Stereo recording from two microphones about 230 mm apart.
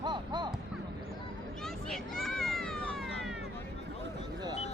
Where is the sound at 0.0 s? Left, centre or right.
Centre.